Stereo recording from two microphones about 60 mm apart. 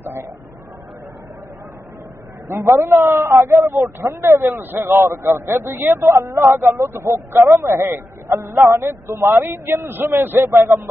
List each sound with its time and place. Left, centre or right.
0.0 s a sound: right
2.4 s speech: right
4.3 s a man's voice: right